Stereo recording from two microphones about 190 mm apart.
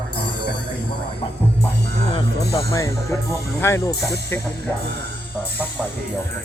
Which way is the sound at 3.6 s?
15° left (ahead or behind).